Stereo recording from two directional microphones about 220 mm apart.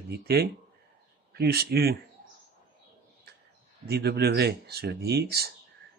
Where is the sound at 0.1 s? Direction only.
45° right (ahead or behind).